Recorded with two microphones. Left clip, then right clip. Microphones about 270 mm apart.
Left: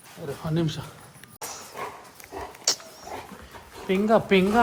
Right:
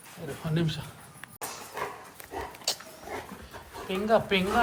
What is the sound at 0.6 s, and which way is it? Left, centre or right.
Speech, left.